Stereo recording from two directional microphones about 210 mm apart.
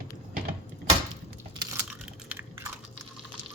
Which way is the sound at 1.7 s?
5° right (ahead or behind).